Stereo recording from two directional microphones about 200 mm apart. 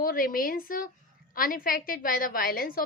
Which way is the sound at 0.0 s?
45° left (ahead or behind).